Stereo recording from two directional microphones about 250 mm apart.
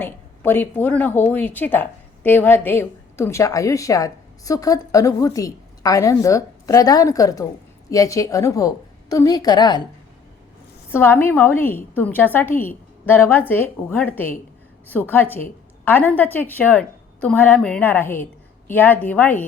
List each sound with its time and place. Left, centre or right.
0.0 s a woman's voice: centre
10.9 s a woman's voice: centre